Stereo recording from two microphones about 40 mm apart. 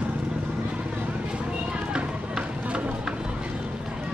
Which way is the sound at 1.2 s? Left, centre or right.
Right.